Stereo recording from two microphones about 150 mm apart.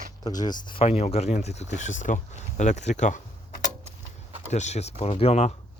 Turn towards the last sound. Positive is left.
turn(degrees=45)  # may be behind; listen again after turning